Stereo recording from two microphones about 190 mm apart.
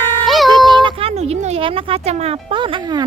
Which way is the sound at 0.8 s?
25° right (ahead or behind).